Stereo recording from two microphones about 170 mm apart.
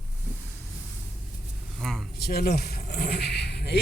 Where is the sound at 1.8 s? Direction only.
Centre (ahead or behind).